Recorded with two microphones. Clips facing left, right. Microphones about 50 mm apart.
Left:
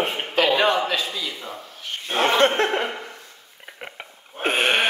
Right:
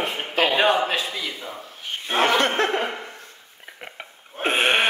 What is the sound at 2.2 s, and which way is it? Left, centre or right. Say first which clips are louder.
Speech: left 2 dB; left.